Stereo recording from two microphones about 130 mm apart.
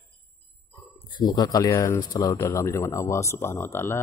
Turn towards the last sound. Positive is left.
turn(degrees=20)  # may be behind; listen again after turning